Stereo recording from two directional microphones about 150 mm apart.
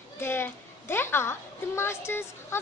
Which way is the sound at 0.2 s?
15° left (ahead or behind).